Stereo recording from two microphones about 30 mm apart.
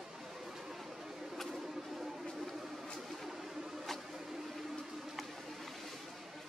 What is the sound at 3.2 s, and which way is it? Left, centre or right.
Music, centre.